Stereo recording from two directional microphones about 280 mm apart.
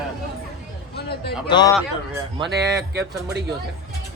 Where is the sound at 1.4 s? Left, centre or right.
Centre.